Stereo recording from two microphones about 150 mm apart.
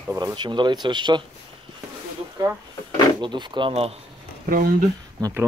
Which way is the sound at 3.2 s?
30° right (ahead or behind).